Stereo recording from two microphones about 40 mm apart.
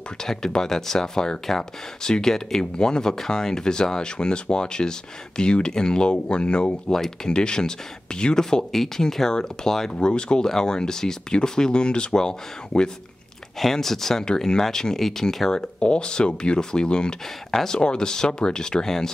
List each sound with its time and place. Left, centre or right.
0.2 s speech: centre
13.6 s speech: centre
15.8 s speech: left